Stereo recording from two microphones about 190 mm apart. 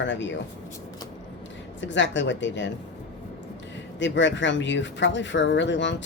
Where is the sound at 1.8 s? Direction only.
75° left (ahead or behind).